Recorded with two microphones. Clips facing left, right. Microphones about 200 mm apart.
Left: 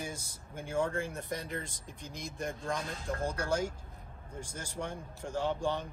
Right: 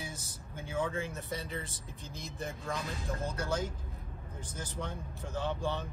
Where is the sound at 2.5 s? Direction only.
50° left (ahead or behind).